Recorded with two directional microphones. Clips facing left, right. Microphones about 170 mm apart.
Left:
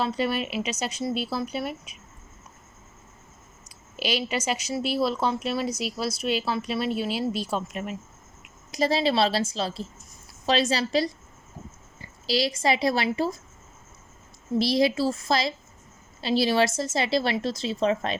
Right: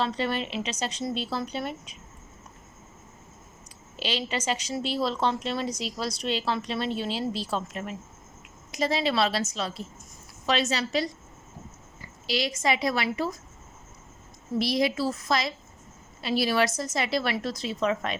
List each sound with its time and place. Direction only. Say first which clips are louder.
0.0 s speech: left 2 dB; 10° left (ahead or behind)
3.9 s speech: left 3 dB; 10° left (ahead or behind)
8.7 s a woman's voice: left 3 dB; 35° left (ahead or behind)
12.2 s a woman's voice: left 3 dB; 35° left (ahead or behind)
14.6 s a woman's voice: left 3 dB; 30° left (ahead or behind)